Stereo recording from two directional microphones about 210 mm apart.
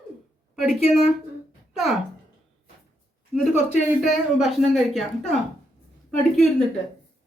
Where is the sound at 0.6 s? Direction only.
Centre (ahead or behind).